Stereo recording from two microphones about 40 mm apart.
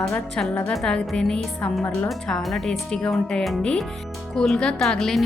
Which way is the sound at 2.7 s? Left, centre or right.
Centre.